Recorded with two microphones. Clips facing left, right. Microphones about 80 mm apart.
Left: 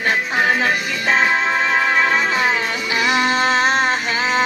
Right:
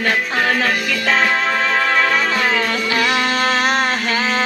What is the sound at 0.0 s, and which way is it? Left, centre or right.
Music, left.